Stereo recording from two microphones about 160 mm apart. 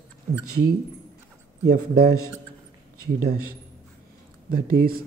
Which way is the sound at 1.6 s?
75° right (ahead or behind).